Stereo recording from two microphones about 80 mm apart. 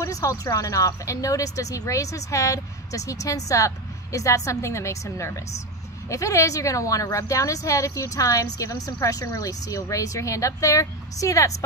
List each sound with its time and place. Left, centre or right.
0.0 s speech: left